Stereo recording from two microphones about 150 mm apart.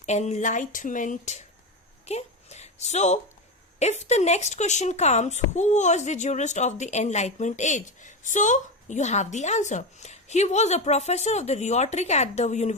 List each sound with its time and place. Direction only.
0.0 s speech: 50° left (ahead or behind)